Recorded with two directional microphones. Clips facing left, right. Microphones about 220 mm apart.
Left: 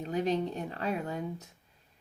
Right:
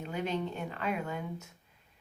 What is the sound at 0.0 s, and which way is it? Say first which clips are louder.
Speech: left 4 dB; 35° left (ahead or behind).